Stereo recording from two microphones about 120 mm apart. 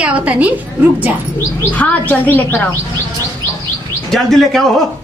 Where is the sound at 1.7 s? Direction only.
15° left (ahead or behind).